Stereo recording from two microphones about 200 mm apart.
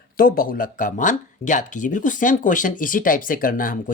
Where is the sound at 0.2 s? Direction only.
45° left (ahead or behind).